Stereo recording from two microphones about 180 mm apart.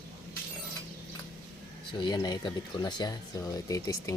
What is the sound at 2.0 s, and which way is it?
Speech, 20° left (ahead or behind).